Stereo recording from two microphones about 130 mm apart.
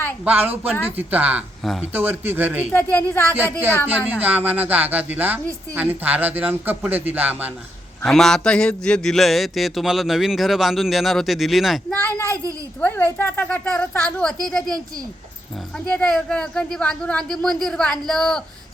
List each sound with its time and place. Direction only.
0.3 s speech: 15° right (ahead or behind)
3.1 s speech: 20° left (ahead or behind)
3.3 s speech: 15° right (ahead or behind)
8.0 s a man's voice: 5° left (ahead or behind)
12.0 s child singing: 15° left (ahead or behind)
12.8 s a man's voice: 15° left (ahead or behind)